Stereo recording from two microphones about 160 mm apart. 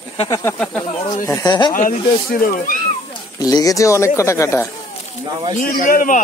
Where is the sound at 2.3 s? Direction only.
60° left (ahead or behind).